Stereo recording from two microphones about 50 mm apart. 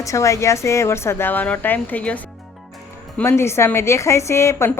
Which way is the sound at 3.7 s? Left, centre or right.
Left.